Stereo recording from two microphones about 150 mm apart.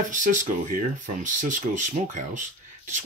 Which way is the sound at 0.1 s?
60° right (ahead or behind).